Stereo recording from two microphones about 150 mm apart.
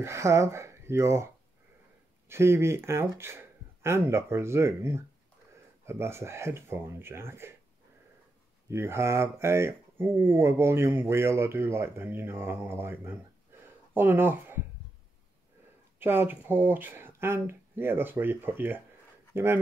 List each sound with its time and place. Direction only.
0.0 s speech: 20° right (ahead or behind)
8.6 s speech: 15° right (ahead or behind)
16.0 s speech: 15° right (ahead or behind)